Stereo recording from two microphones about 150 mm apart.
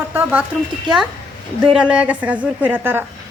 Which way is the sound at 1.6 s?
5° right (ahead or behind).